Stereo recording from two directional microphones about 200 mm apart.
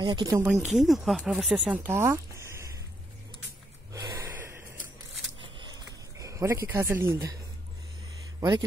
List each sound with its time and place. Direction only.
0.0 s speech: 20° right (ahead or behind)
0.7 s speech: centre (ahead or behind)
3.9 s gasp: 15° right (ahead or behind)
6.1 s speech: 15° right (ahead or behind)
8.4 s speech: 20° right (ahead or behind)